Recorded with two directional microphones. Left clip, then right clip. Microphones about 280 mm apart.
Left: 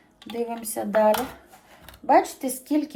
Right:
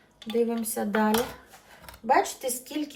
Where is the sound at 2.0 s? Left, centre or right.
Left.